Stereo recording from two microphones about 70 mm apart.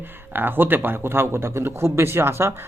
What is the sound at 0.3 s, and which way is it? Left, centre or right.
Speech, right.